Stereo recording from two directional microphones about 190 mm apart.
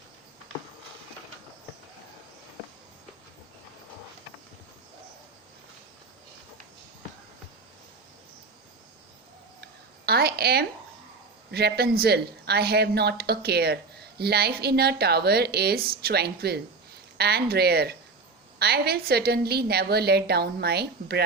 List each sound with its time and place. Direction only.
10.1 s a woman's voice: 55° right (ahead or behind)